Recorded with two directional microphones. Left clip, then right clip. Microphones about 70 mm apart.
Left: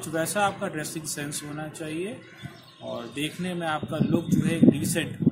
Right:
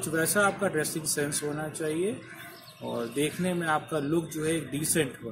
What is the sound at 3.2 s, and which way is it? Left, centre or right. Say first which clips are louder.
A man's voice: even; left.